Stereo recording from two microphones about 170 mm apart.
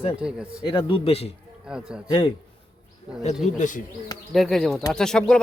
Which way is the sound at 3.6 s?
50° left (ahead or behind).